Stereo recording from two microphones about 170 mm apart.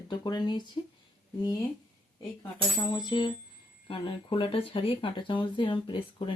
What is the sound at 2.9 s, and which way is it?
Speech, 25° left (ahead or behind).